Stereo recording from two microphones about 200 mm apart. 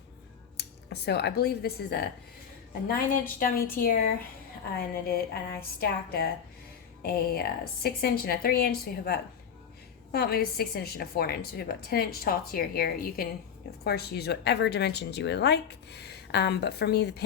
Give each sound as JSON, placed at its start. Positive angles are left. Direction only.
{"t": 1.0, "sound": "a woman's voice", "side_deg": 55}
{"t": 7.0, "sound": "a woman's voice", "side_deg": 50}